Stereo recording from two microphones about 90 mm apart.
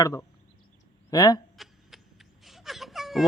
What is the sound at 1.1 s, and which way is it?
Speech, 45° left (ahead or behind).